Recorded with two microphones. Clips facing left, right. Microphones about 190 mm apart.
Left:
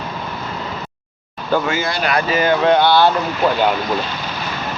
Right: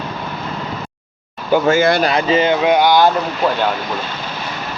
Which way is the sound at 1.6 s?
50° right (ahead or behind).